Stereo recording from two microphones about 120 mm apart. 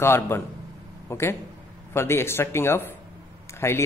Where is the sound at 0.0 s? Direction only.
20° left (ahead or behind).